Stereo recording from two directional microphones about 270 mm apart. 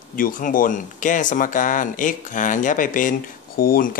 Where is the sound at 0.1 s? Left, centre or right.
Left.